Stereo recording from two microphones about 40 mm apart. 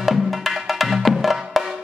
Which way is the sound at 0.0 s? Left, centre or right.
Centre.